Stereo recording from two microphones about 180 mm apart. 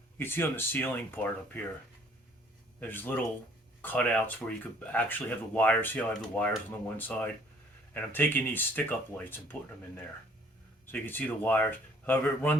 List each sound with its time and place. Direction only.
0.2 s speech: 10° left (ahead or behind)
2.8 s speech: 10° left (ahead or behind)
10.8 s speech: 10° left (ahead or behind)